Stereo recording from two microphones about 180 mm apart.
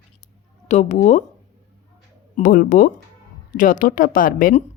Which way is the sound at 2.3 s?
50° left (ahead or behind).